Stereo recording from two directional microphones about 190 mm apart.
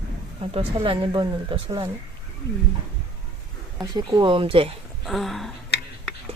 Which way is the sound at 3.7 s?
20° right (ahead or behind).